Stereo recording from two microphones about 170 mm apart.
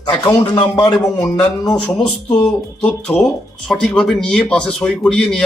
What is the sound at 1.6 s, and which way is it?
Speech, 5° left (ahead or behind).